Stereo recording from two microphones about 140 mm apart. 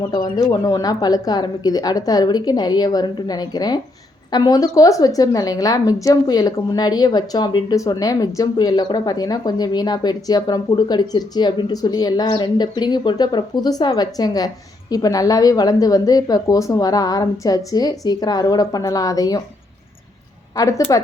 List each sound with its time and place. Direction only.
0.0 s a woman's voice: 30° left (ahead or behind)
20.6 s a woman's voice: 25° left (ahead or behind)